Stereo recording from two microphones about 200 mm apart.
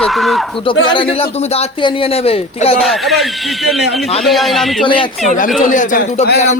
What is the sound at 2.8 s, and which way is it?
Speech, centre (ahead or behind).